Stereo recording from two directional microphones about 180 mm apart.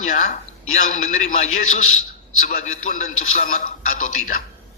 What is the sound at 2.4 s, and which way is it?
A man's voice, 40° left (ahead or behind).